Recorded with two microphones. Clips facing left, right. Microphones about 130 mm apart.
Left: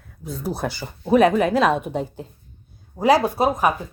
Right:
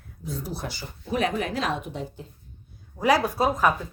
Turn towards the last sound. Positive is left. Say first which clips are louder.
# left 3 dB
turn(degrees=15)  # may be behind; listen again after turning